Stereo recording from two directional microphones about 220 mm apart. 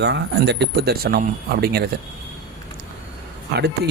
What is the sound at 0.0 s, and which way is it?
Speech, 50° right (ahead or behind).